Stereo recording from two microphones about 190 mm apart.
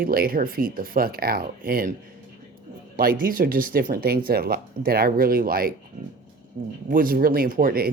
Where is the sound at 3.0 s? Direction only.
50° right (ahead or behind).